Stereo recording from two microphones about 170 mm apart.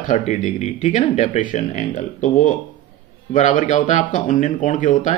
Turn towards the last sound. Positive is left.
turn(degrees=45)  # may be behind; listen again after turning